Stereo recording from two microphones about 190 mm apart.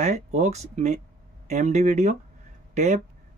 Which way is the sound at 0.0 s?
35° right (ahead or behind).